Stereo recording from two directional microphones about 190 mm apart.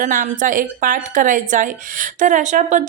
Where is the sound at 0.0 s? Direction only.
45° right (ahead or behind).